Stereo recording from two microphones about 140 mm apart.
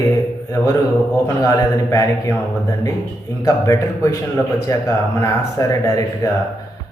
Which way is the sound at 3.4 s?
20° left (ahead or behind).